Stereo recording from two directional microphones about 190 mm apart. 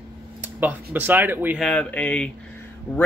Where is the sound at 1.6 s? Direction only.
5° left (ahead or behind).